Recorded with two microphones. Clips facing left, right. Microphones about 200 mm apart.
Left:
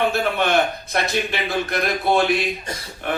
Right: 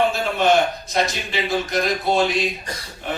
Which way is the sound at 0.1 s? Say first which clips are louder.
Right 1 dB; 60° left (ahead or behind).